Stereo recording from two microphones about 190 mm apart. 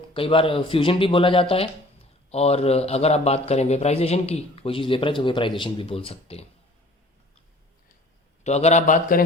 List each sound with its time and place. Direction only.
0.1 s speech: 30° left (ahead or behind)
8.4 s a man's voice: 35° left (ahead or behind)